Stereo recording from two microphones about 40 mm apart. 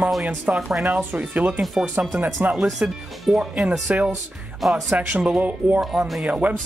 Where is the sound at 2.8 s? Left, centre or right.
Right.